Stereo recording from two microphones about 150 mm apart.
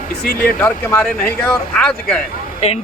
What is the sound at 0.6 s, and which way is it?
Speech, 10° left (ahead or behind).